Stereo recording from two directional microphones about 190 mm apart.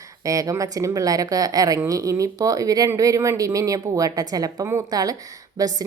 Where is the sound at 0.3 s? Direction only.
15° right (ahead or behind).